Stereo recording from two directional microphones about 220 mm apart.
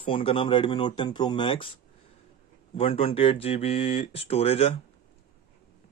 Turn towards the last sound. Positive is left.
turn(degrees=25)  # may be behind; listen again after turning